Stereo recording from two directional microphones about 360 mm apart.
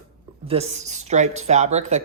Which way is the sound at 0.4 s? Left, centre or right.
Centre.